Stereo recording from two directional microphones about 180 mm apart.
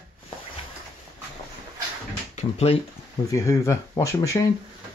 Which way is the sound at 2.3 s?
35° left (ahead or behind).